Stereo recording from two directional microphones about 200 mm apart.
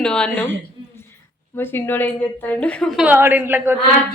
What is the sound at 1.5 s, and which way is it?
A woman's voice, 10° left (ahead or behind).